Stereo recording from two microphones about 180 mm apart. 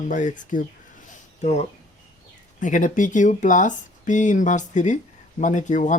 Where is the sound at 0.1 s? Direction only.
45° left (ahead or behind).